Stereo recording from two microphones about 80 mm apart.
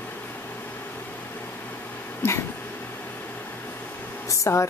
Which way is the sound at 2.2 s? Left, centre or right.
Left.